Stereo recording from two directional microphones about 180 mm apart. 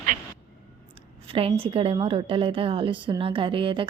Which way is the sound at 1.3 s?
30° right (ahead or behind).